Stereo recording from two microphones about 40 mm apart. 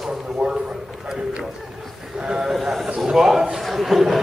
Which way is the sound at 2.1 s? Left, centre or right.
Right.